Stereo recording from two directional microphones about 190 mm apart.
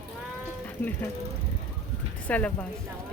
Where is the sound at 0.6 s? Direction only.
10° left (ahead or behind).